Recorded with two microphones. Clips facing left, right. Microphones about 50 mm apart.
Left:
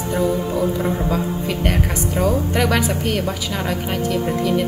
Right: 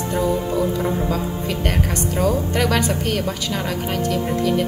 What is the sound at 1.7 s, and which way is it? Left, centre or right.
A woman's voice, centre.